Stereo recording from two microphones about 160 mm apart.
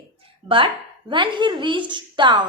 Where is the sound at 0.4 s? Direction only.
35° right (ahead or behind).